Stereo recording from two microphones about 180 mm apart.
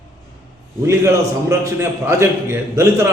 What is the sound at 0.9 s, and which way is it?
A man's voice, 15° right (ahead or behind).